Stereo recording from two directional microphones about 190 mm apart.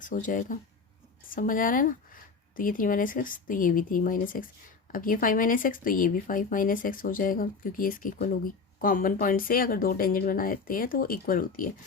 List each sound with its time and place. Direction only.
0.0 s speech: 45° left (ahead or behind)